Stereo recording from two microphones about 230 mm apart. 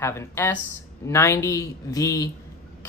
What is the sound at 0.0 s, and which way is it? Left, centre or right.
Speech, centre.